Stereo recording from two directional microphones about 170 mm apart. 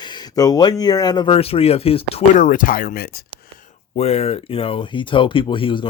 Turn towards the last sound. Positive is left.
turn(degrees=30)  # may be behind; listen again after turning